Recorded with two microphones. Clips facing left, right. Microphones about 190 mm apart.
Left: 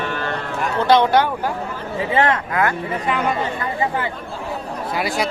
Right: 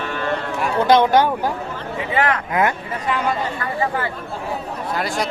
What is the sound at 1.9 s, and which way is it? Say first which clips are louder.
Speech: left 2 dB; 30° left (ahead or behind).